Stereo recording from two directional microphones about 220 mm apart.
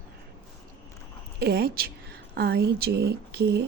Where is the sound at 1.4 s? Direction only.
45° right (ahead or behind).